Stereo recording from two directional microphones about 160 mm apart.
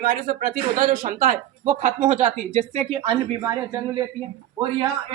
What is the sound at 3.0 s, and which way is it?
A man's voice, 30° right (ahead or behind).